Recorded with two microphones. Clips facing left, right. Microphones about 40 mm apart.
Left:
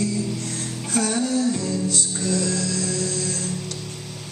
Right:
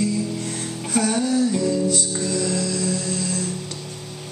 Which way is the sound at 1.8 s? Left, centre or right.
Left.